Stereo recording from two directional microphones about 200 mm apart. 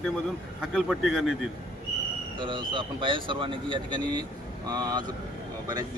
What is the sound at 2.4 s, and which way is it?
Speech, 25° right (ahead or behind).